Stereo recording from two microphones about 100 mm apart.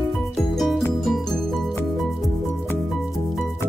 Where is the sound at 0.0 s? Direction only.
Centre (ahead or behind).